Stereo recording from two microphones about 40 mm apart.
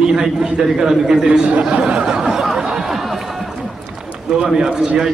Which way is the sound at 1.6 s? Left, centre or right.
Right.